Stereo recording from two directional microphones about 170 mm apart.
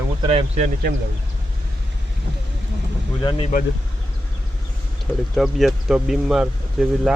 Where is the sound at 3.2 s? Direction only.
30° left (ahead or behind).